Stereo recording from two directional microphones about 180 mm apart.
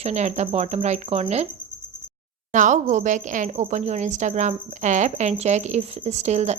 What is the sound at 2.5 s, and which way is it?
A woman's voice, 45° right (ahead or behind).